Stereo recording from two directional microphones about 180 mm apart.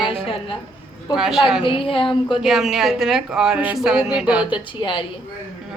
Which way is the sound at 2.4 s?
Centre (ahead or behind).